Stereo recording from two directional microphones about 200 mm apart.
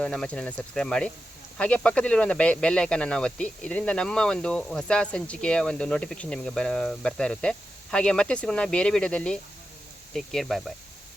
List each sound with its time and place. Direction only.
0.0 s speech: 5° left (ahead or behind)